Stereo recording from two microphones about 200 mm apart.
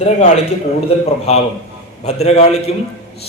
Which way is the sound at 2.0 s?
30° left (ahead or behind).